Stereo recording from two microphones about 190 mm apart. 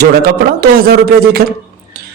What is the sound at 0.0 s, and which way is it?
A man's voice, 55° right (ahead or behind).